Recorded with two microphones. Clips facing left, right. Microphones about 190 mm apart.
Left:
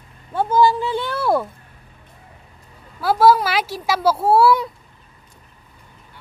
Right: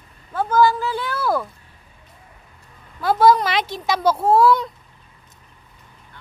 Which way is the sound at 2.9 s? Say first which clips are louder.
Left 1 dB; 5° left (ahead or behind).